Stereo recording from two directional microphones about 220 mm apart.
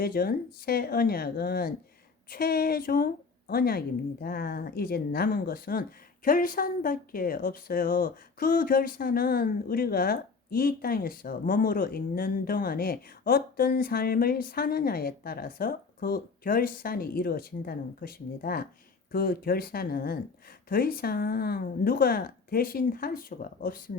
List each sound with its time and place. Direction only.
0.0 s a woman's voice: 40° left (ahead or behind)